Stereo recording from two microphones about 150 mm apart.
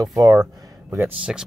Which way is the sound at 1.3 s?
5° right (ahead or behind).